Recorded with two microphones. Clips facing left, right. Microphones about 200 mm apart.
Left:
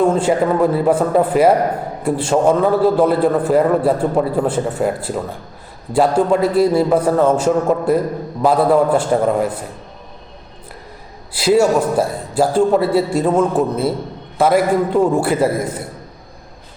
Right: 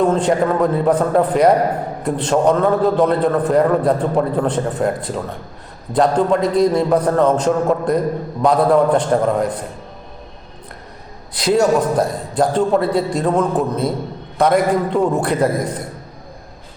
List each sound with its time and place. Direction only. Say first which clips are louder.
0.0 s a man's voice: left 1 dB; 10° left (ahead or behind)
11.3 s a man's voice: left 1 dB; 5° left (ahead or behind)